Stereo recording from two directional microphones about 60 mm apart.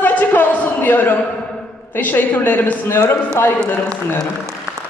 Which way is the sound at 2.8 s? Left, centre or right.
Left.